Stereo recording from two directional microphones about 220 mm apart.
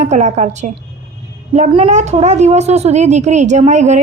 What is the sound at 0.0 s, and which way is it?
A woman's voice, 30° right (ahead or behind).